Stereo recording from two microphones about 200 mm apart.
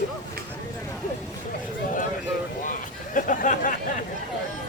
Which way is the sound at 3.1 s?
40° left (ahead or behind).